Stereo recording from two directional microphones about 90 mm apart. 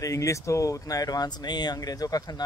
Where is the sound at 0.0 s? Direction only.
35° left (ahead or behind).